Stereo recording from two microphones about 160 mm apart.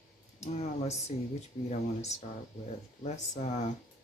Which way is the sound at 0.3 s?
45° left (ahead or behind).